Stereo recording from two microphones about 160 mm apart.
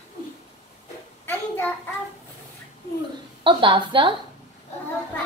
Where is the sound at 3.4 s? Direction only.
30° right (ahead or behind).